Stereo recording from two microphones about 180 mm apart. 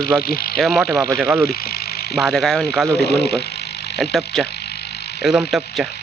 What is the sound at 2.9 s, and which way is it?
Speech, 65° left (ahead or behind).